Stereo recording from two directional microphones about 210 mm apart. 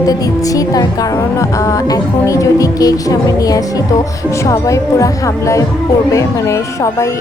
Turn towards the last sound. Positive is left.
turn(degrees=15)  # may be behind; listen again after turning